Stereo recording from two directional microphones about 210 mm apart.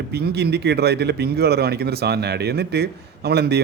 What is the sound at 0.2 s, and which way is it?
Speech, 50° right (ahead or behind).